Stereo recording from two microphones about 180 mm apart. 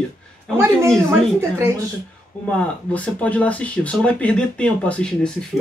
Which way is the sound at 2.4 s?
10° left (ahead or behind).